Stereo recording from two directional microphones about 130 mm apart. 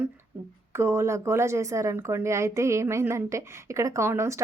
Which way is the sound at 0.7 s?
20° right (ahead or behind).